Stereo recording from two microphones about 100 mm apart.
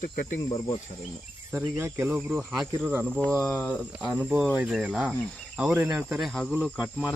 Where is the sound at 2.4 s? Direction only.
Centre (ahead or behind).